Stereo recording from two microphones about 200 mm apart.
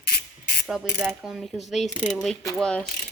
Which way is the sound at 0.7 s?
Centre (ahead or behind).